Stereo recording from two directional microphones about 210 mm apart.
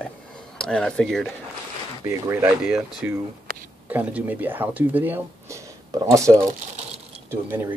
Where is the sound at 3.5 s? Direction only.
45° right (ahead or behind).